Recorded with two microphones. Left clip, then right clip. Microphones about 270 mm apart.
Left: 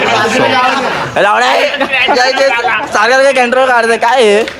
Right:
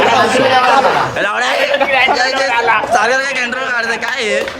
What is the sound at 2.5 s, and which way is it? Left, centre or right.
Speech, right.